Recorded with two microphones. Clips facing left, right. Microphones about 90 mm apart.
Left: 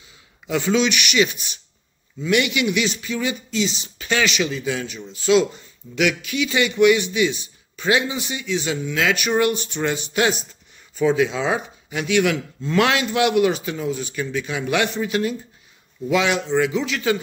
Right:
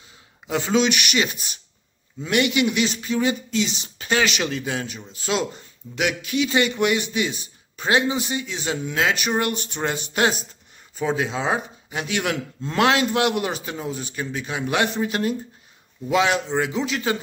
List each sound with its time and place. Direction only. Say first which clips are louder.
0.5 s a man's voice: left 1 dB; 35° right (ahead or behind); by 3.9 s 55° right (ahead or behind)
4.0 s speech: left 1 dB; 40° right (ahead or behind)
4.7 s a man's voice: left 1 dB; 40° right (ahead or behind)